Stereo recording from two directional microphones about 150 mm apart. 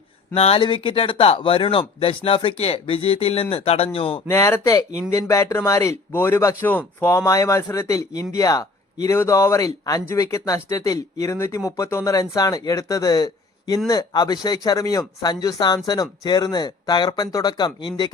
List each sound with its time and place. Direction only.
0.3 s speech: 40° left (ahead or behind)
4.3 s speech: 20° left (ahead or behind)